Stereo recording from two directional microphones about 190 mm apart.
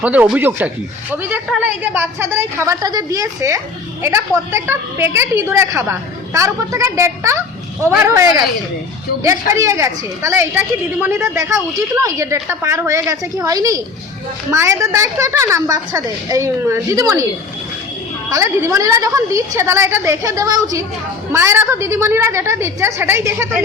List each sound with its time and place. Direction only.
0.0 s a woman's voice: 5° right (ahead or behind)
18.3 s a woman's voice: 15° right (ahead or behind)